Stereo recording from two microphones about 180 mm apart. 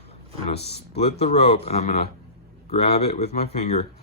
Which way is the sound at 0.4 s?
35° left (ahead or behind).